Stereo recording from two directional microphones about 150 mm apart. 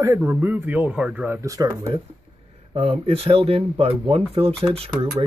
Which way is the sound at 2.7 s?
40° right (ahead or behind).